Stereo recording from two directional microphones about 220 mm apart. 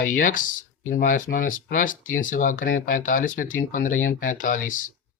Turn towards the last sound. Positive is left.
turn(degrees=35)  # may be behind; listen again after turning